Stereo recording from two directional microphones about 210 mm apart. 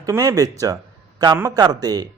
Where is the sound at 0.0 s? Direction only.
15° right (ahead or behind).